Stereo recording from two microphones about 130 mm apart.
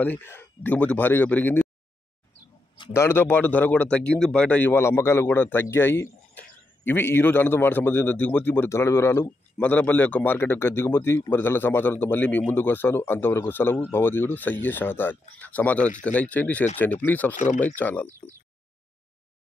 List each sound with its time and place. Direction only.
0.0 s speech: 15° left (ahead or behind)
2.9 s speech: 20° left (ahead or behind)